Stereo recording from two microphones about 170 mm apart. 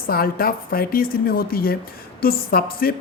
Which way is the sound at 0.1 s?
60° left (ahead or behind).